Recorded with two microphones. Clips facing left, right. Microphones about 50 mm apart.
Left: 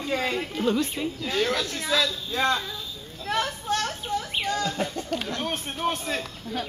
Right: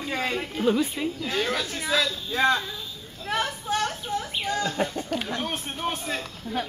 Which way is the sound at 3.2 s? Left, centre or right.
Centre.